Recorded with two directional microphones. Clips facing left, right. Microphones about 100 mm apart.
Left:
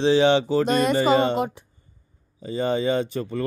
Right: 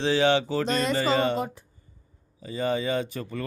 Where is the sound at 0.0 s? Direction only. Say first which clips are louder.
Left 4 dB; 20° left (ahead or behind).